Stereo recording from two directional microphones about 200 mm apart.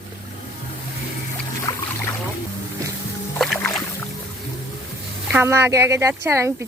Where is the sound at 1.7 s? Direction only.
20° left (ahead or behind).